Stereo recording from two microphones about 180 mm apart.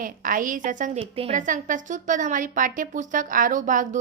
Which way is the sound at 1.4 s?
45° right (ahead or behind).